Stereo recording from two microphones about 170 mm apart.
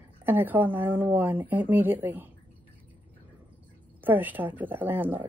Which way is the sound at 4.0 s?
10° right (ahead or behind).